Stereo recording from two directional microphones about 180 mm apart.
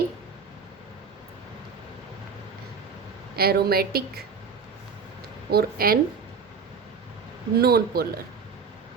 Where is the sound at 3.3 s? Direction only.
60° right (ahead or behind).